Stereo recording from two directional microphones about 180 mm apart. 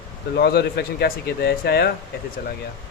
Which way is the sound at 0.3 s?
65° left (ahead or behind).